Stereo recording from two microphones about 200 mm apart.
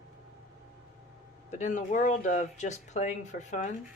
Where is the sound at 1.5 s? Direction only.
35° left (ahead or behind).